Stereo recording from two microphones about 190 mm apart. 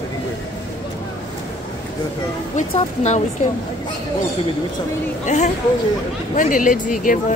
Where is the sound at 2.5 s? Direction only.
35° left (ahead or behind).